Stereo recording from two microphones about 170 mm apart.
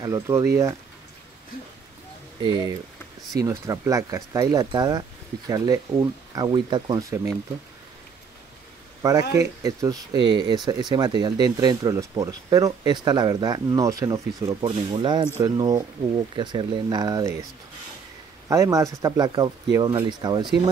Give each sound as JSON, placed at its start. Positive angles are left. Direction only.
{"t": 0.0, "sound": "speech", "side_deg": -15}
{"t": 2.4, "sound": "speech", "side_deg": -25}
{"t": 9.3, "sound": "speech", "side_deg": -20}
{"t": 18.5, "sound": "speech", "side_deg": -20}